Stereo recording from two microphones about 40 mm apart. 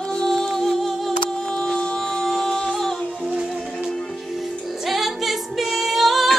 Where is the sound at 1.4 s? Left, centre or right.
Left.